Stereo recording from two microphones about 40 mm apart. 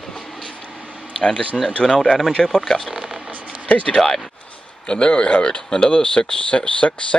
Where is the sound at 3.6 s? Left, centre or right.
Left.